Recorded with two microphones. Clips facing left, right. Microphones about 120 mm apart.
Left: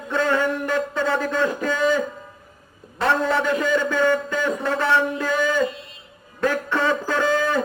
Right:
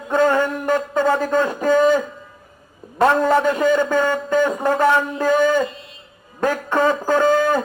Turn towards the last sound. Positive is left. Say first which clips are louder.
# right 5 dB
turn(degrees=-40)  # may be behind; listen again after turning